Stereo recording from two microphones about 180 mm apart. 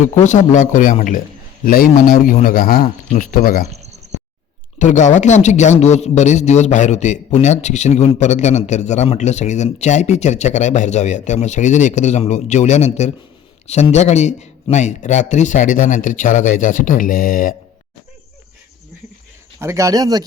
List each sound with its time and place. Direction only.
0.0 s speech: 40° left (ahead or behind)
3.7 s a sound: 35° right (ahead or behind)
4.8 s speech: 45° left (ahead or behind)
19.5 s speech: 15° right (ahead or behind)